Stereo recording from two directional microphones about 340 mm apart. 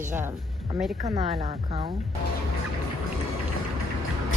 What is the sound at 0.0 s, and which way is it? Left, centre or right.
A woman's voice, centre.